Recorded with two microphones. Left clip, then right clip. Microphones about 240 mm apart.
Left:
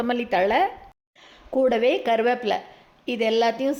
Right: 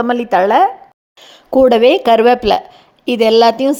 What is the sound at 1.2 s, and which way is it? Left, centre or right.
Speech, right.